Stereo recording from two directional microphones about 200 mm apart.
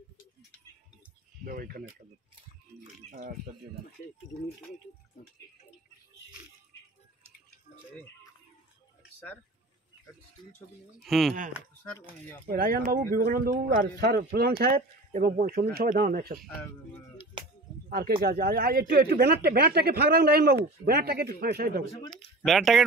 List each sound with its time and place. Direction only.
1.4 s speech: 45° right (ahead or behind)
3.1 s speech: 45° right (ahead or behind)
11.0 s speech: centre (ahead or behind)
12.4 s speech: 45° right (ahead or behind)
17.8 s speech: 50° right (ahead or behind)
22.1 s speech: centre (ahead or behind)